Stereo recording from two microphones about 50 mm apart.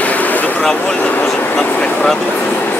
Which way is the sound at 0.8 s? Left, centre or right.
Left.